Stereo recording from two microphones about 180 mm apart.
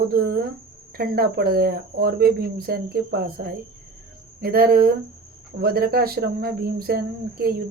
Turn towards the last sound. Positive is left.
turn(degrees=-55)  # may be behind; listen again after turning